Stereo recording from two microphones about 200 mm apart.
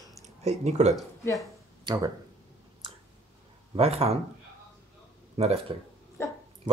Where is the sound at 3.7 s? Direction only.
30° right (ahead or behind).